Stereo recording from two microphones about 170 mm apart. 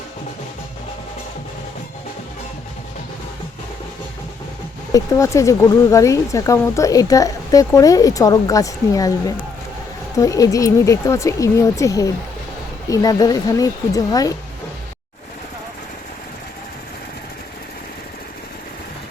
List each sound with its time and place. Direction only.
4.9 s speech: 20° left (ahead or behind)